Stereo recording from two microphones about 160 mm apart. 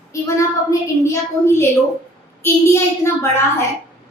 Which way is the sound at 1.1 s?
15° left (ahead or behind).